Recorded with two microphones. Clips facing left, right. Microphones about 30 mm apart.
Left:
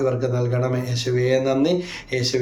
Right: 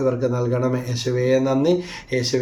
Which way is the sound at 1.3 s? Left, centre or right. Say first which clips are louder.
Right 2 dB; left.